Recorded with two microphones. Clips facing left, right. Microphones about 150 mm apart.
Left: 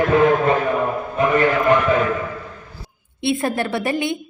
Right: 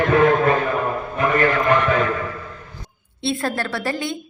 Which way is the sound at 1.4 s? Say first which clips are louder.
Even; 5° left (ahead or behind).